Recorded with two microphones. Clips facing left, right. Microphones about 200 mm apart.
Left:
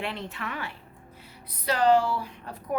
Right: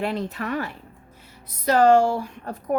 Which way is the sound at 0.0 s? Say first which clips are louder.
Right 7 dB; 40° right (ahead or behind).